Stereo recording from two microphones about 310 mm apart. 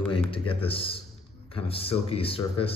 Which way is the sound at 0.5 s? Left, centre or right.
Centre.